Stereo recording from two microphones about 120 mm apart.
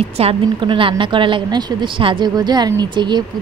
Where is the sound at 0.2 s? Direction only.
45° right (ahead or behind).